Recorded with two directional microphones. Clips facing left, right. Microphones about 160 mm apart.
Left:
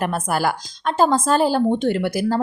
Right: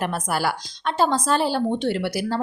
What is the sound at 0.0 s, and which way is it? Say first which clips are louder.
A woman's voice: left 3 dB; 50° left (ahead or behind).